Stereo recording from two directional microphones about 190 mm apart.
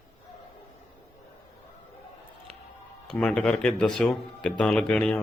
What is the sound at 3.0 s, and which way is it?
Speech, 5° left (ahead or behind).